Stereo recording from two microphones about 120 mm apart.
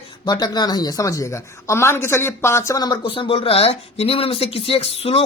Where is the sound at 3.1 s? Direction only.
50° left (ahead or behind).